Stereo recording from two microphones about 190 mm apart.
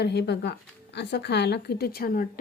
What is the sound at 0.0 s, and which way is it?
Speech, 60° left (ahead or behind).